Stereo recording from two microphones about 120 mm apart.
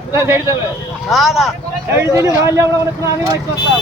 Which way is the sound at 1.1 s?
5° right (ahead or behind).